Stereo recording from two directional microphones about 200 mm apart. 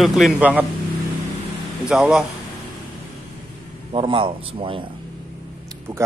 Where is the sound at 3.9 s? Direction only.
25° right (ahead or behind).